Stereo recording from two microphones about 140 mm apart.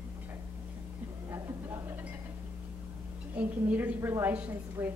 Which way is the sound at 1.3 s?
20° right (ahead or behind).